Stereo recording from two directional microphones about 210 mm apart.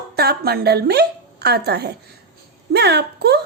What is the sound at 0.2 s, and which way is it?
A woman's voice, 50° right (ahead or behind).